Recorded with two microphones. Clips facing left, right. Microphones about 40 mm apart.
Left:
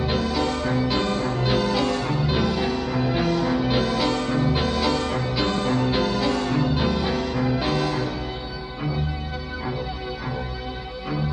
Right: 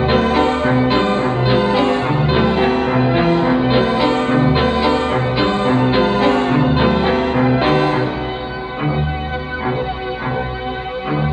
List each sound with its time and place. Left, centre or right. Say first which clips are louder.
0.0 s music: right 9 dB; right